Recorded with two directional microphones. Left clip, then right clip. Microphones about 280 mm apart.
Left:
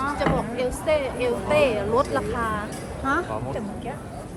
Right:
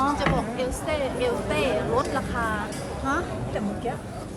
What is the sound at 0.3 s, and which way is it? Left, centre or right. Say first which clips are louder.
Music: left 1 dB; left.